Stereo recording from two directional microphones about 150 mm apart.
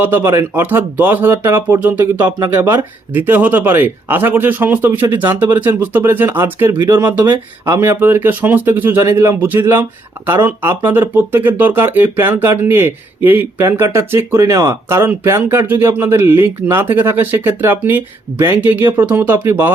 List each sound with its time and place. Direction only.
0.0 s speech: 15° right (ahead or behind)
6.7 s speech: 25° right (ahead or behind)
7.0 s speech: 10° right (ahead or behind)